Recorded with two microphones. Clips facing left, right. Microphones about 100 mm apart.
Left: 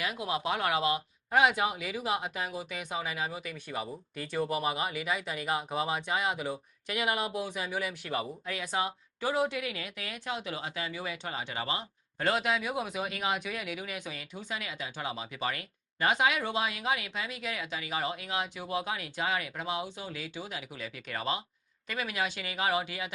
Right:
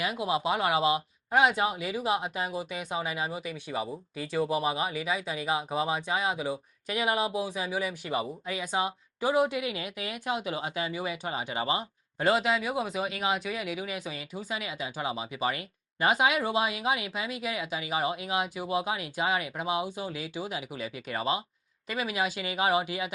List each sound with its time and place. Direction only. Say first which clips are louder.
0.0 s speech: right 4 dB; 10° right (ahead or behind)
1.3 s speech: right 2 dB; centre (ahead or behind); by 6.3 s 25° right (ahead or behind)
6.3 s speech: right 3 dB; 5° right (ahead or behind)
7.7 s speech: right 3 dB; 5° right (ahead or behind)
12.3 s speech: right 3 dB; centre (ahead or behind); by 23.1 s 15° right (ahead or behind)